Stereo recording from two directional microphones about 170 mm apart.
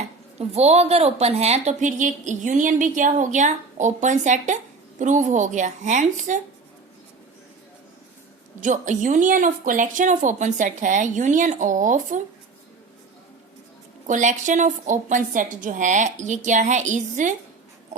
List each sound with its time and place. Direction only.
0.3 s a woman's voice: 40° right (ahead or behind)
8.6 s a woman's voice: 45° right (ahead or behind)
14.1 s a woman's voice: 45° right (ahead or behind)